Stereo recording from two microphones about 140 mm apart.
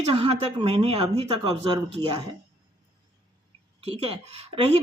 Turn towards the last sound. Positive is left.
turn(degrees=-45)  # may be behind; listen again after turning